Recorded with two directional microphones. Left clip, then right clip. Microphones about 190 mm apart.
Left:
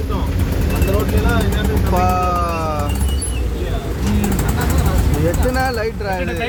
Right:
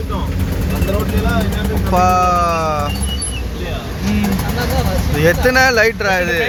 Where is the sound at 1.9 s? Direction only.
5° right (ahead or behind).